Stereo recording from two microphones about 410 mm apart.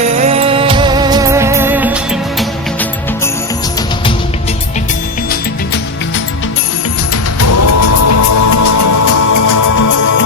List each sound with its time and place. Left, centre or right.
0.0 s music: centre
7.1 s music: left